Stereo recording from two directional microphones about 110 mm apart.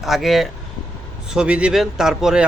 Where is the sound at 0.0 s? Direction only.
Centre (ahead or behind).